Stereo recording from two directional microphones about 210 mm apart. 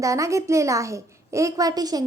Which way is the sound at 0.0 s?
15° right (ahead or behind).